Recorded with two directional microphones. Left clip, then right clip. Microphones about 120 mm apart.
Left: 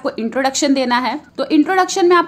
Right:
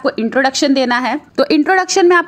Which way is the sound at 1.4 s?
75° right (ahead or behind).